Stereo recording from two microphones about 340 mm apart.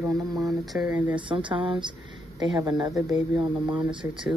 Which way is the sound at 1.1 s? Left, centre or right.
Centre.